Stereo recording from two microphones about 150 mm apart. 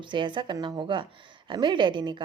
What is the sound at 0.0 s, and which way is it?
A woman's voice, 30° right (ahead or behind).